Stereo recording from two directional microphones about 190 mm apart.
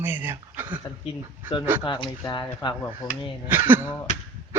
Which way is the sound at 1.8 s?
25° left (ahead or behind).